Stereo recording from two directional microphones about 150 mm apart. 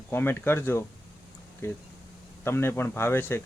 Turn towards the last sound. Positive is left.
turn(degrees=15)  # may be behind; listen again after turning